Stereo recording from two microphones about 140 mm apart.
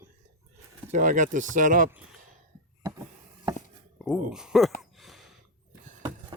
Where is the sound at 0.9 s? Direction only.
65° right (ahead or behind).